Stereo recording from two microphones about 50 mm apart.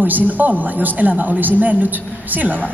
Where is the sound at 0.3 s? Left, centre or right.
Right.